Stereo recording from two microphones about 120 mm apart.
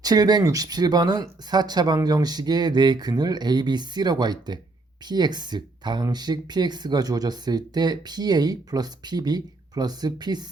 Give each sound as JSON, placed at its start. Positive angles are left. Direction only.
{"t": 0.0, "sound": "speech", "side_deg": -35}